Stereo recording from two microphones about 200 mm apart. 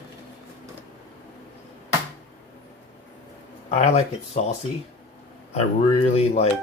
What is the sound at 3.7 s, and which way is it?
Speech, 30° left (ahead or behind).